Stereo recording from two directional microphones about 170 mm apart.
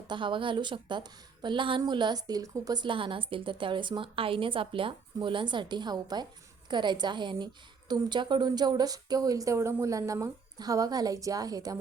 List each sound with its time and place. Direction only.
0.1 s a woman's voice: 30° right (ahead or behind)